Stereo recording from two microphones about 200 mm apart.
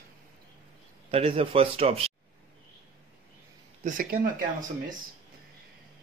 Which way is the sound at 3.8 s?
45° right (ahead or behind).